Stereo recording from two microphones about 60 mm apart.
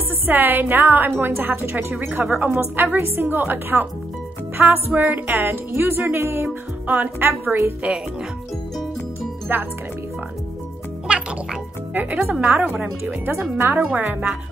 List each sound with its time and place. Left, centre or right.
0.3 s speech: right
9.5 s speech: right
11.1 s music: centre
11.9 s speech: right